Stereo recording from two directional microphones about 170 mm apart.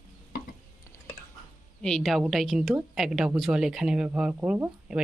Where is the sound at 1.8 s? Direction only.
5° left (ahead or behind).